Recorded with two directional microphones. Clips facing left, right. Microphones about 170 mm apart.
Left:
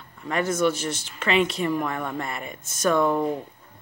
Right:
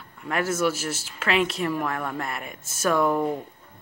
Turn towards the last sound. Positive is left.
turn(degrees=-5)  # may be behind; listen again after turning